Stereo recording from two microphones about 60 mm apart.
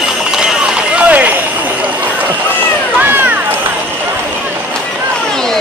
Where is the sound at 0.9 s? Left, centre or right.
Right.